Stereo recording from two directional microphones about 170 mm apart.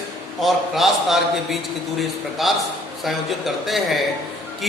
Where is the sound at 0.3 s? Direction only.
Centre (ahead or behind).